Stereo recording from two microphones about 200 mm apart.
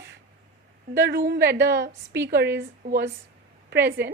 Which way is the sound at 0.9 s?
55° right (ahead or behind).